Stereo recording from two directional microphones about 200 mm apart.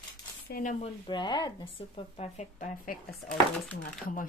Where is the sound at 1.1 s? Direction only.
20° left (ahead or behind).